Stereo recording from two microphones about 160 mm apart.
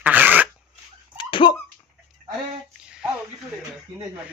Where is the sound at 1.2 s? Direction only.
30° left (ahead or behind).